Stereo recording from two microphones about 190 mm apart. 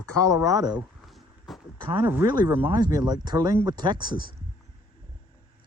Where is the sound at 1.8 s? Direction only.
30° right (ahead or behind).